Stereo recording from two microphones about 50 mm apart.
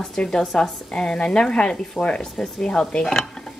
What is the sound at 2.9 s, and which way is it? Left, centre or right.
Speech, centre.